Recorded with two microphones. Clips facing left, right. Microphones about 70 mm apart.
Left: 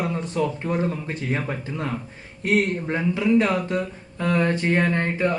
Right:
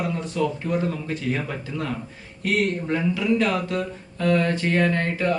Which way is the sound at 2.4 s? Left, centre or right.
Left.